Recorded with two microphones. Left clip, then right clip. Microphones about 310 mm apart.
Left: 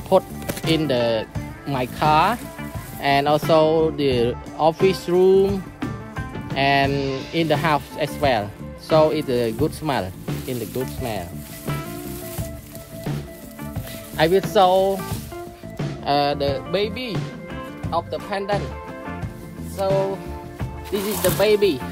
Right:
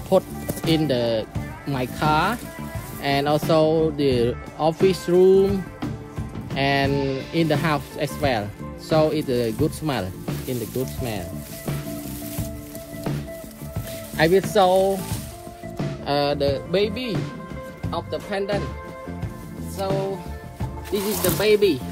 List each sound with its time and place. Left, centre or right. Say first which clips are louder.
0.1 s speech: left 2 dB; left
6.5 s speech: left 3 dB; left
14.1 s speech: left 1 dB; left
16.1 s speech: left 2 dB; left
20.9 s speech: left 2 dB; left